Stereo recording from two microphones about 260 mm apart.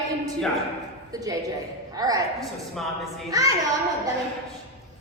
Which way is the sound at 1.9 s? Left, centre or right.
Centre.